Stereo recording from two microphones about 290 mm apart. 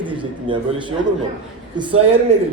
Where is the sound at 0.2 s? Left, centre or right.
Centre.